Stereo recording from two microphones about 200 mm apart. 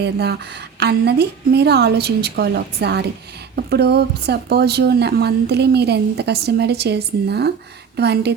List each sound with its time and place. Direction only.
0.0 s a woman's voice: 55° right (ahead or behind)